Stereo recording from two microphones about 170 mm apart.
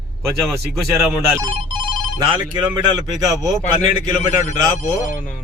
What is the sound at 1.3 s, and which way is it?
Speech, 20° right (ahead or behind).